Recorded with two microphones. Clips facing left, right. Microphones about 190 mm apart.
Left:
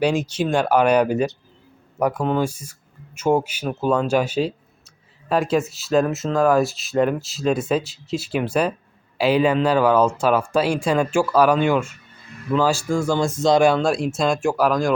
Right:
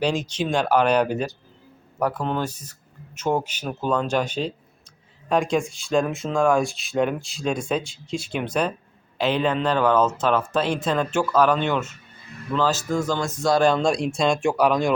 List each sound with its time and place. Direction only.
0.0 s speech: 10° left (ahead or behind)
13.1 s speech: 25° left (ahead or behind)
13.6 s speech: 5° left (ahead or behind)